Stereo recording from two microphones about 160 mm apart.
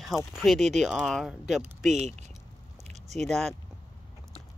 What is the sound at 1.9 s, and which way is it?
Speech, 45° right (ahead or behind).